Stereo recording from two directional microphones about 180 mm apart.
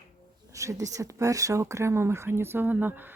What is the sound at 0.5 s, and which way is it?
Speech, 15° right (ahead or behind).